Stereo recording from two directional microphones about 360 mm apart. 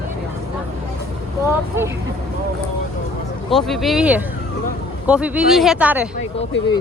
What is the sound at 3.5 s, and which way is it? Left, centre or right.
Speech, centre.